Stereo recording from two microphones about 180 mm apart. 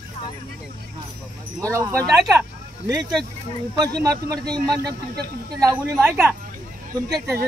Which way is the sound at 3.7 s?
20° right (ahead or behind).